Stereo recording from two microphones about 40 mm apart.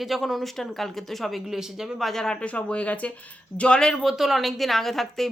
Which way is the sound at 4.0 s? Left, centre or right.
Centre.